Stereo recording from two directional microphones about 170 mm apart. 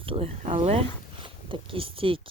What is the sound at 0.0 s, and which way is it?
Speech, 35° right (ahead or behind).